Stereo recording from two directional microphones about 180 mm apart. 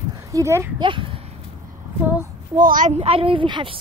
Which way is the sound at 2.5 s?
45° right (ahead or behind).